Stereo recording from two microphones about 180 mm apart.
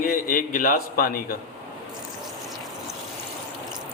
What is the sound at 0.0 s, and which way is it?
Speech, 50° left (ahead or behind).